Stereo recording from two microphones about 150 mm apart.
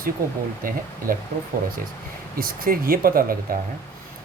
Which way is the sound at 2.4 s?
75° right (ahead or behind).